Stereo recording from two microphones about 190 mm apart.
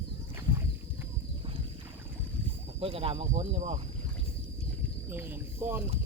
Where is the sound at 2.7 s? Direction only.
30° right (ahead or behind).